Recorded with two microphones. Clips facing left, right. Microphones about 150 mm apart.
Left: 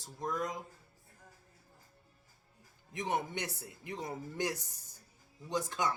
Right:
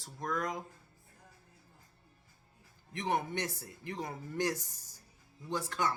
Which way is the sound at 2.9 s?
20° left (ahead or behind).